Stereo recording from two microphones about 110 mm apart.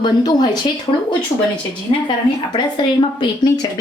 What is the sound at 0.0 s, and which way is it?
Speech, 40° left (ahead or behind).